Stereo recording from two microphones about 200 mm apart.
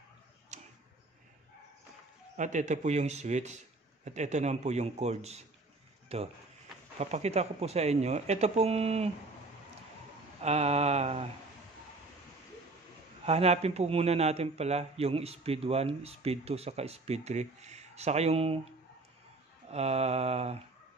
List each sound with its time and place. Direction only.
0.5 s tick-tock: 35° right (ahead or behind)
2.3 s a man's voice: 35° right (ahead or behind)
10.4 s a man's voice: 30° right (ahead or behind)
13.2 s a man's voice: 30° right (ahead or behind)
19.7 s a man's voice: 30° right (ahead or behind)